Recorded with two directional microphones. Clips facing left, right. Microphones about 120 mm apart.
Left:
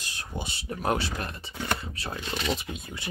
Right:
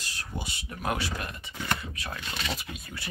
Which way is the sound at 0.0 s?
20° left (ahead or behind).